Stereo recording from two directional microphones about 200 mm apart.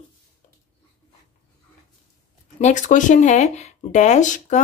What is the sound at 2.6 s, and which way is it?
Speech, 40° left (ahead or behind).